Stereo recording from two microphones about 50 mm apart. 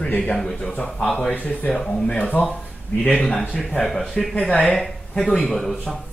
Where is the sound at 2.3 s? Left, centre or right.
Left.